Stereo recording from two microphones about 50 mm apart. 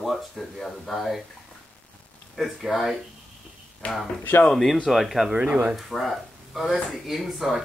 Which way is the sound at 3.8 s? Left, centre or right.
Left.